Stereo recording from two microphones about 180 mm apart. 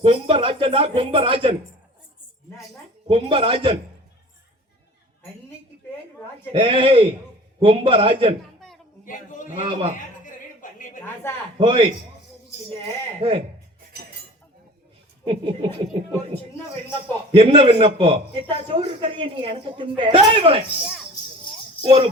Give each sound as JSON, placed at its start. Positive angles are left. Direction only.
{"t": 0.0, "sound": "a man's voice", "side_deg": -30}
{"t": 3.1, "sound": "a man's voice", "side_deg": -30}
{"t": 6.5, "sound": "a man's voice", "side_deg": -30}
{"t": 9.0, "sound": "a sound", "side_deg": 45}
{"t": 10.2, "sound": "music", "side_deg": 50}
{"t": 11.0, "sound": "a woman's voice", "side_deg": 15}
{"t": 11.5, "sound": "a man's voice", "side_deg": -30}
{"t": 13.1, "sound": "a man's voice", "side_deg": -30}
{"t": 15.2, "sound": "a man's voice", "side_deg": -30}
{"t": 21.8, "sound": "a man's voice", "side_deg": -30}